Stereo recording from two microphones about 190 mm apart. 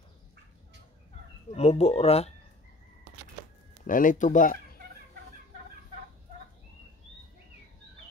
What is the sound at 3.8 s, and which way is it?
Speech, 45° left (ahead or behind).